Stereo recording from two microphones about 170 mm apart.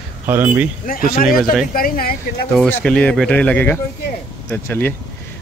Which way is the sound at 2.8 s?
5° left (ahead or behind).